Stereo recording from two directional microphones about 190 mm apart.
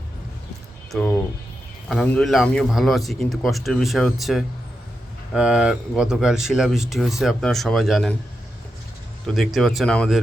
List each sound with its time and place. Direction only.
0.9 s speech: 5° left (ahead or behind)
9.2 s speech: centre (ahead or behind)